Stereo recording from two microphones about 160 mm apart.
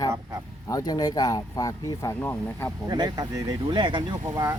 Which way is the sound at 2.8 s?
25° right (ahead or behind).